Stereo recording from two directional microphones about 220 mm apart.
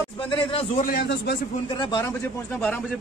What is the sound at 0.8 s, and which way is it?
Speech, 45° left (ahead or behind).